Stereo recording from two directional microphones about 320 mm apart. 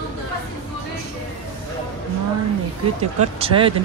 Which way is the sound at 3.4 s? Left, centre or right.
Centre.